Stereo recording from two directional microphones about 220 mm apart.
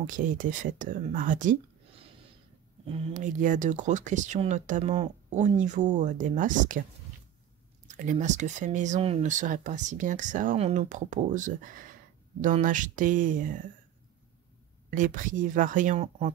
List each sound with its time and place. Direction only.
0.0 s speech: 40° right (ahead or behind)
2.9 s speech: 30° right (ahead or behind)
7.9 s speech: 35° right (ahead or behind)
14.9 s speech: 35° right (ahead or behind)